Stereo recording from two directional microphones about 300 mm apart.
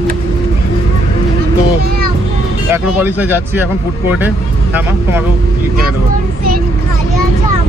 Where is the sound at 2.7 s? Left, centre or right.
Centre.